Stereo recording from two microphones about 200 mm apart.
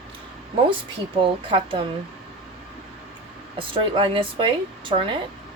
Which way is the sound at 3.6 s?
25° right (ahead or behind).